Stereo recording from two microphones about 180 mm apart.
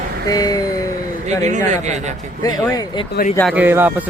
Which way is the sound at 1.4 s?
40° right (ahead or behind).